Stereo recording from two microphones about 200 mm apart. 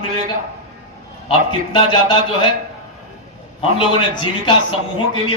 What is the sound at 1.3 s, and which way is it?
Speech, 25° left (ahead or behind).